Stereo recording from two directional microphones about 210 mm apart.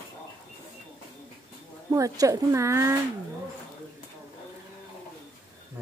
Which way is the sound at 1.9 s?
15° right (ahead or behind).